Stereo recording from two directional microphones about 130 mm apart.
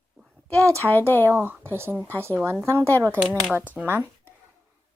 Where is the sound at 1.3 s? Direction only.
15° right (ahead or behind).